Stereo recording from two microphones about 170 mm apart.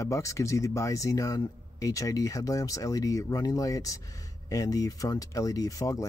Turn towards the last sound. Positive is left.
turn(degrees=20)  # may be behind; listen again after turning